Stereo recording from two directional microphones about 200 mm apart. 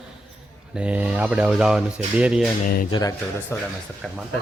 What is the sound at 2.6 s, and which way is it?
Speech, 45° left (ahead or behind).